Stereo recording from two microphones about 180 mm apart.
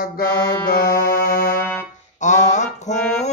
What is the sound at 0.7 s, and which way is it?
Music, 55° left (ahead or behind).